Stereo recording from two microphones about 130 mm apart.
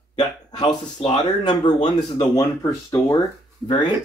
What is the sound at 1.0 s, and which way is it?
Speech, 35° left (ahead or behind).